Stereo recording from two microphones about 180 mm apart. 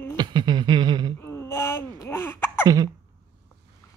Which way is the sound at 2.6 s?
25° right (ahead or behind).